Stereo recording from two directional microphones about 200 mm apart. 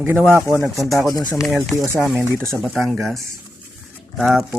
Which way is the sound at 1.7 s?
15° right (ahead or behind).